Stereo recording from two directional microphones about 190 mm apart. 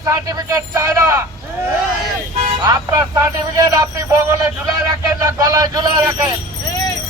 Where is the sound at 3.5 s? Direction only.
20° right (ahead or behind).